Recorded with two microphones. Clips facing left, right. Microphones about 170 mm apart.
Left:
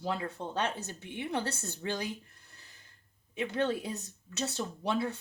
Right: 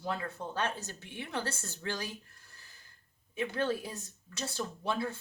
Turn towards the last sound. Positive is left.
turn(degrees=25)  # may be behind; listen again after turning